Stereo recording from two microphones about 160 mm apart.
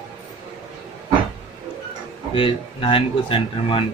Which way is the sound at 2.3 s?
35° left (ahead or behind).